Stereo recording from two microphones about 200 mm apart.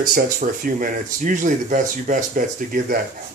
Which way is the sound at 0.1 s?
45° right (ahead or behind).